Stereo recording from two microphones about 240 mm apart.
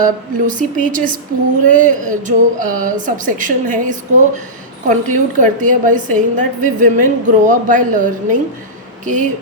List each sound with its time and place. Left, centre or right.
0.0 s a woman's voice: right